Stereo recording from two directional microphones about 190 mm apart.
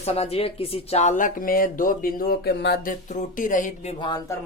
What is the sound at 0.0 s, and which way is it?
Speech, 35° left (ahead or behind).